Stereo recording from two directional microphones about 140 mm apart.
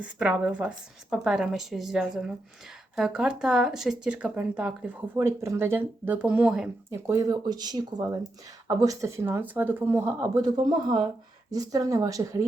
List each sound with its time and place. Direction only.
0.0 s speech: 10° right (ahead or behind)
5.1 s speech: 20° right (ahead or behind)
6.9 s speech: 20° right (ahead or behind)
10.3 s speech: 30° right (ahead or behind)